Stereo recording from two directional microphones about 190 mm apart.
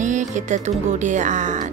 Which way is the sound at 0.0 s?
40° right (ahead or behind).